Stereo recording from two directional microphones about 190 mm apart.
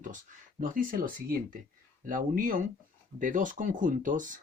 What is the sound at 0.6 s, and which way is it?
Speech, 45° right (ahead or behind).